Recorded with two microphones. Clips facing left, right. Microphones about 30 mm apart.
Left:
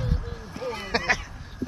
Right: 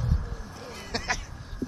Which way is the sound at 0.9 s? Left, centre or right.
Left.